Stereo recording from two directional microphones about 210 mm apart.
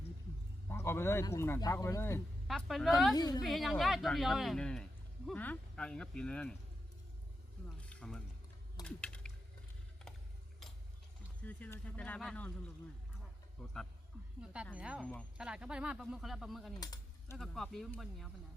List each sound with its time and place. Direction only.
0.7 s speech: 10° left (ahead or behind)
2.5 s speech: centre (ahead or behind)
3.2 s a woman's voice: 20° left (ahead or behind)
3.4 s speech: centre (ahead or behind)
7.8 s a sound: 5° left (ahead or behind)
8.8 s typing: 5° left (ahead or behind)
11.4 s speech: 5° left (ahead or behind)
13.6 s a sound: centre (ahead or behind)
14.8 s speech: 5° right (ahead or behind)
16.8 s a sound: 20° left (ahead or behind)
17.3 s speech: centre (ahead or behind)